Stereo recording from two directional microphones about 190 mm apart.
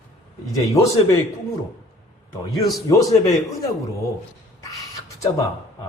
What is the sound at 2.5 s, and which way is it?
Speech, 20° left (ahead or behind).